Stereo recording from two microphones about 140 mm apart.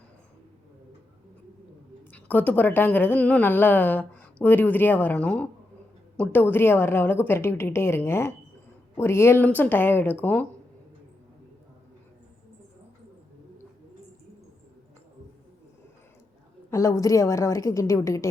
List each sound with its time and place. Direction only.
2.1 s a woman's voice: 10° left (ahead or behind)
16.7 s a woman's voice: 20° left (ahead or behind)